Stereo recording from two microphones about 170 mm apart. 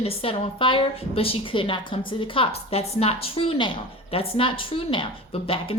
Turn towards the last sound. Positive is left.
turn(degrees=35)  # may be behind; listen again after turning